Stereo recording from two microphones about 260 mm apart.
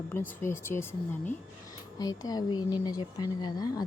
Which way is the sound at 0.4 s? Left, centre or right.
Centre.